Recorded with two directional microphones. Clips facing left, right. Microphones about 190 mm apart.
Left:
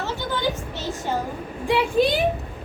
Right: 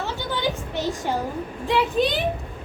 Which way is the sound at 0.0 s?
15° right (ahead or behind).